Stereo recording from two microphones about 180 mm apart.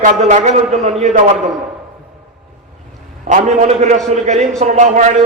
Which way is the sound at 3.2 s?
45° right (ahead or behind).